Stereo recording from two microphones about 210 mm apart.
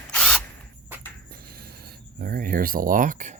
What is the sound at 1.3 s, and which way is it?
Writing, 45° right (ahead or behind).